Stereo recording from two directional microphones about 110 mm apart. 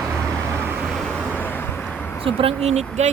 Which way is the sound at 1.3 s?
15° left (ahead or behind).